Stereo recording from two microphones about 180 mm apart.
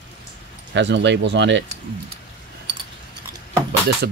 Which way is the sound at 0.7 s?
75° right (ahead or behind).